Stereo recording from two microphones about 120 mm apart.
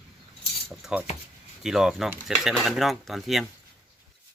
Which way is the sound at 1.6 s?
5° right (ahead or behind).